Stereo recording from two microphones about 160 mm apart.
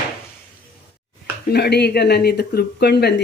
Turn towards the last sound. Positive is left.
turn(degrees=90)